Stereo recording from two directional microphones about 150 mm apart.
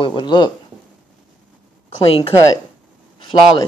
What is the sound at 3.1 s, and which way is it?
Speech, 30° left (ahead or behind).